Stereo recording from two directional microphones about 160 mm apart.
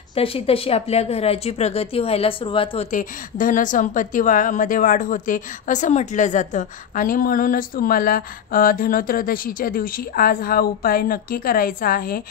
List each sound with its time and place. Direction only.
0.1 s speech: 35° left (ahead or behind)
2.9 s a woman's voice: 55° left (ahead or behind)